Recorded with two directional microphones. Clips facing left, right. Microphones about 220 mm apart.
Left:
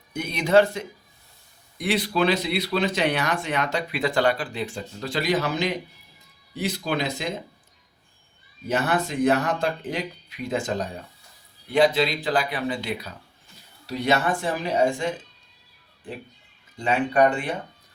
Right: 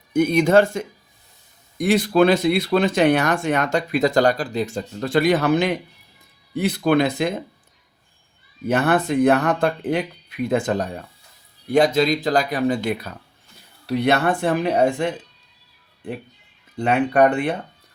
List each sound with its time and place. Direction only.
0.1 s speech: 50° right (ahead or behind)
8.6 s speech: 55° right (ahead or behind)
11.7 s speech: 45° right (ahead or behind)
16.7 s speech: 60° right (ahead or behind)